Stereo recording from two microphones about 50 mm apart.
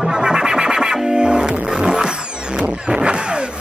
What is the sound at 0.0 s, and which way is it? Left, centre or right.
Music, centre.